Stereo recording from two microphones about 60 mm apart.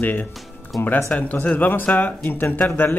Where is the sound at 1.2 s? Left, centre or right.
Left.